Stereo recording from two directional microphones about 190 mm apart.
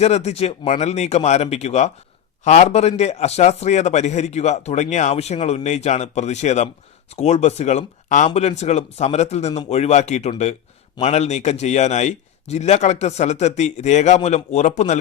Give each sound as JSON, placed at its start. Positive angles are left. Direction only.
{"t": 0.0, "sound": "a man's voice", "side_deg": 35}